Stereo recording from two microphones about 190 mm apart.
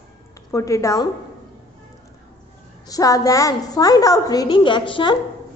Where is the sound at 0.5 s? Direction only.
15° left (ahead or behind).